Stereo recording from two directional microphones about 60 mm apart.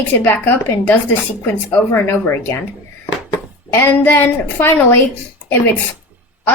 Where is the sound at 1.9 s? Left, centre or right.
Left.